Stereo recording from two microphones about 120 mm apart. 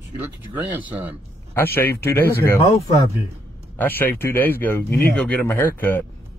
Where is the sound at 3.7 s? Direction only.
15° left (ahead or behind).